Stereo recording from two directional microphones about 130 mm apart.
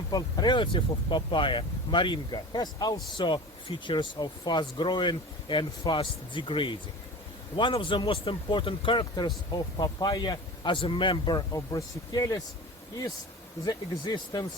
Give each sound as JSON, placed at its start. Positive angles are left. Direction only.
{"t": 0.1, "sound": "speech", "side_deg": 30}
{"t": 13.7, "sound": "speech", "side_deg": 30}